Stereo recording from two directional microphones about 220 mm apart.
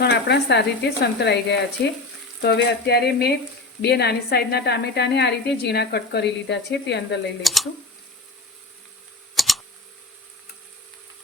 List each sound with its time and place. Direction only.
0.0 s speech: 50° left (ahead or behind)
7.4 s speech: centre (ahead or behind)
9.3 s typing: centre (ahead or behind)